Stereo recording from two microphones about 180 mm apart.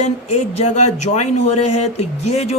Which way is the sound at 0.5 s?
40° left (ahead or behind).